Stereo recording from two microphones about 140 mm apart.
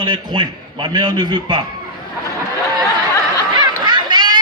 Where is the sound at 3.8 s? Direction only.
30° right (ahead or behind).